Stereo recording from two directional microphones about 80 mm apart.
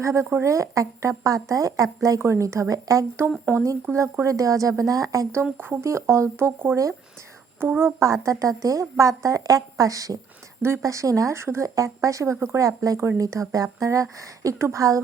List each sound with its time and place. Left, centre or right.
0.0 s a woman's voice: right
3.5 s a woman's voice: right
5.4 s a woman's voice: right